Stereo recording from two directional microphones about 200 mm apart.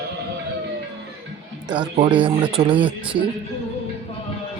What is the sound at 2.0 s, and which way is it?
Speech, 25° right (ahead or behind).